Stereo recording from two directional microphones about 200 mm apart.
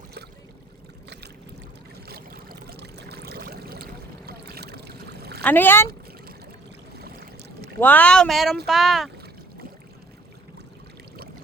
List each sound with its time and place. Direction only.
2.0 s a sound: 50° right (ahead or behind)
5.4 s speech: 10° left (ahead or behind)
7.8 s speech: 10° left (ahead or behind)